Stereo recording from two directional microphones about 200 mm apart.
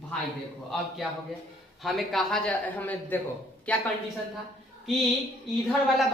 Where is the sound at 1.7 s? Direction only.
Centre (ahead or behind).